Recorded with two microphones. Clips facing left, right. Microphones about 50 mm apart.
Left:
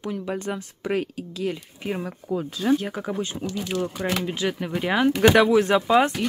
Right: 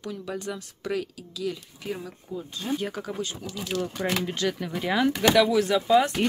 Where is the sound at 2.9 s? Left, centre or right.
Centre.